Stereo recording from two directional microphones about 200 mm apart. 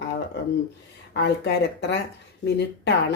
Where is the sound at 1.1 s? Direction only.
55° left (ahead or behind).